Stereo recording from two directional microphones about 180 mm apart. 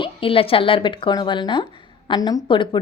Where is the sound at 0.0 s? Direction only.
30° left (ahead or behind).